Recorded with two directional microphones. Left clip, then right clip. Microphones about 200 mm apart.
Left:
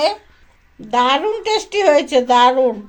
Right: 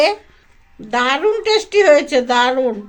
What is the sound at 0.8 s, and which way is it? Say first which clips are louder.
Speech: left 1 dB; 5° right (ahead or behind).